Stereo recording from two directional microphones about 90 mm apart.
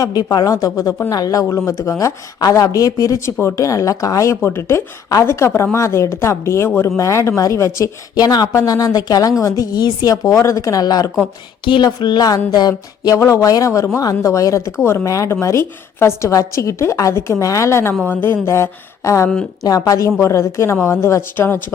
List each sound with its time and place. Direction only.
0.0 s a woman's voice: 45° left (ahead or behind)
8.1 s a woman's voice: 50° left (ahead or behind)
11.6 s speech: 55° left (ahead or behind)
13.1 s a woman's voice: 35° left (ahead or behind)